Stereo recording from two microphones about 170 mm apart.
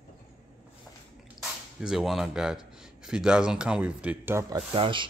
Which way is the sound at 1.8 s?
Centre (ahead or behind).